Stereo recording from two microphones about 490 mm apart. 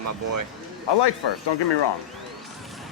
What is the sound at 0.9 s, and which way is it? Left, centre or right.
Speech, left.